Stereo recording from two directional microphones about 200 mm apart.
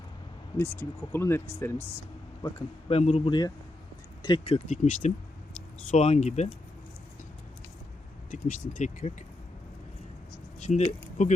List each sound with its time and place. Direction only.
0.5 s speech: 10° left (ahead or behind)
2.9 s a man's voice: 30° left (ahead or behind)
8.3 s speech: 40° left (ahead or behind)
10.6 s a sound: 35° left (ahead or behind)
11.2 s speech: 35° left (ahead or behind)